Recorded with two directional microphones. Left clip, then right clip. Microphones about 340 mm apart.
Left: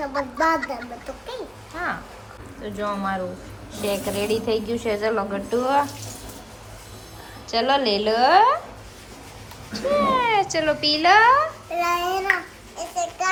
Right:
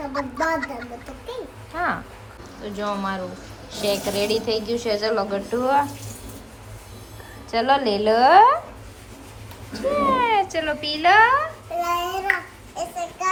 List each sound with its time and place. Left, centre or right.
0.1 s a woman's voice: centre
7.5 s a woman's voice: centre
9.7 s a woman's voice: centre
12.8 s a sound: right